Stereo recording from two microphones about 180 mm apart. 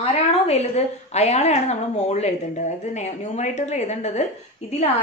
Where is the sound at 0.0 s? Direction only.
35° left (ahead or behind).